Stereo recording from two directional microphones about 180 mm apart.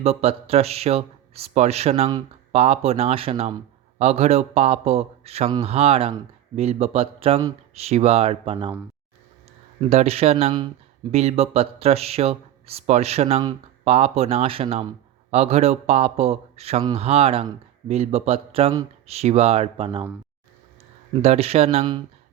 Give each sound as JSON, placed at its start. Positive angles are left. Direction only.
{"t": 0.0, "sound": "speech", "side_deg": -35}
{"t": 9.9, "sound": "speech", "side_deg": -35}
{"t": 11.1, "sound": "speech", "side_deg": -35}
{"t": 21.1, "sound": "speech", "side_deg": -35}